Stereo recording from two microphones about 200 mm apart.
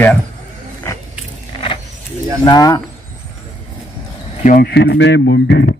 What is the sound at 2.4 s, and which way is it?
Speech, 20° left (ahead or behind).